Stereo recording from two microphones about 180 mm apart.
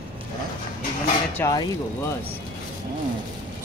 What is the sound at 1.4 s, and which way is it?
Speech, 15° left (ahead or behind).